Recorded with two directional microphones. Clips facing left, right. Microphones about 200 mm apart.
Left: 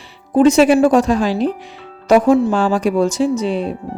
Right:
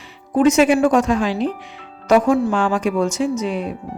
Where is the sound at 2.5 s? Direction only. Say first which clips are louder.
Left 3 dB; 35° left (ahead or behind).